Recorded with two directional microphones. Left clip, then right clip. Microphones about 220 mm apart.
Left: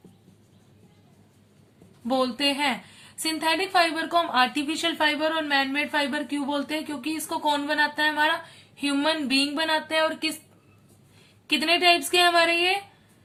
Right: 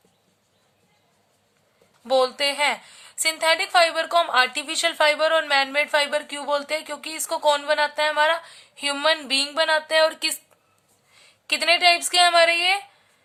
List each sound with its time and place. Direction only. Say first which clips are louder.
2.0 s a woman's voice: right 4 dB; 40° right (ahead or behind)
11.4 s a woman's voice: right 2 dB; 40° right (ahead or behind)